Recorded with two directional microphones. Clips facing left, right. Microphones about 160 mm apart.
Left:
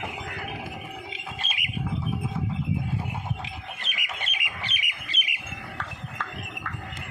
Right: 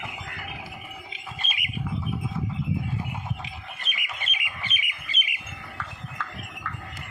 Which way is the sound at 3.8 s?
85° left.